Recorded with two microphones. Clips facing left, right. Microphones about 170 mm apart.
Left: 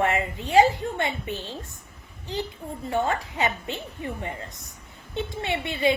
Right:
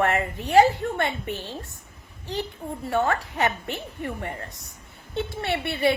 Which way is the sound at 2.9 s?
20° left (ahead or behind).